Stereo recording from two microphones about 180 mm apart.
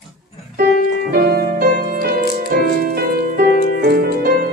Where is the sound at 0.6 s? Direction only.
55° right (ahead or behind).